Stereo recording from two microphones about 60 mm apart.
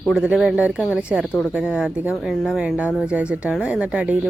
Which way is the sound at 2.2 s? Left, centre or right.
Centre.